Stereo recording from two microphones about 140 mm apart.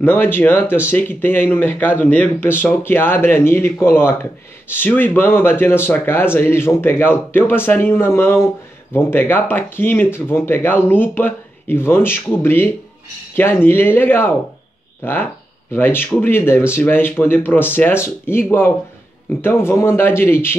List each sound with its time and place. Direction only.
0.0 s speech: 15° left (ahead or behind)